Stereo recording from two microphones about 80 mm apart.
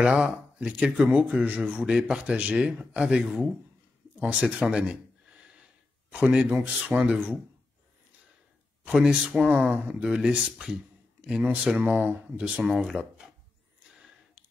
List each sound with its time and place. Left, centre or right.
0.0 s speech: centre
8.8 s speech: centre